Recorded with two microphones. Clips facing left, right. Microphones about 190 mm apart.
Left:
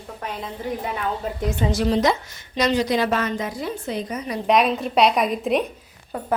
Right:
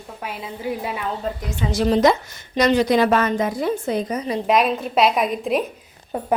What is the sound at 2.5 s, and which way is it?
A woman's voice, 60° right (ahead or behind).